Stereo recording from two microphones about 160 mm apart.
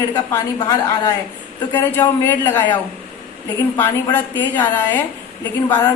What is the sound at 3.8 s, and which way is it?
A woman's voice, 10° left (ahead or behind).